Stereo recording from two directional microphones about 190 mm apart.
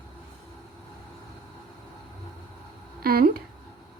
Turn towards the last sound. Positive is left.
turn(degrees=-55)  # may be behind; listen again after turning